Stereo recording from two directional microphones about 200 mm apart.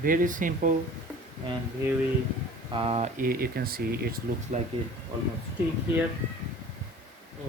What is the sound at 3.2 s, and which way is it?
Speech, 45° right (ahead or behind).